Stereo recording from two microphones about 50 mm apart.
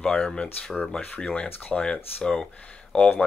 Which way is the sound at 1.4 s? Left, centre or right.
Left.